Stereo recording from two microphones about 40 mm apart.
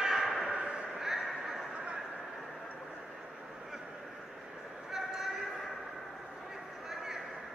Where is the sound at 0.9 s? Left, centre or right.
Centre.